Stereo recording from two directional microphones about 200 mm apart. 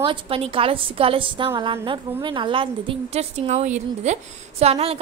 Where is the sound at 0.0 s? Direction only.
25° right (ahead or behind).